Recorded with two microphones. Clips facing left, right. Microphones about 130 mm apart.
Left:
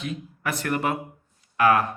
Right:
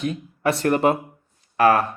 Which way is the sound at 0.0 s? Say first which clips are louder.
Right 8 dB; 35° right (ahead or behind).